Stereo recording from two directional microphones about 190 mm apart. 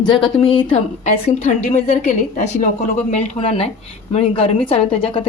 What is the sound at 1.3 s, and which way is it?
Speech, 40° left (ahead or behind).